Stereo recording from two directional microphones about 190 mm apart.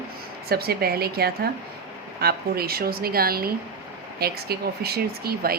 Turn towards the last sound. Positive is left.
turn(degrees=-55)  # may be behind; listen again after turning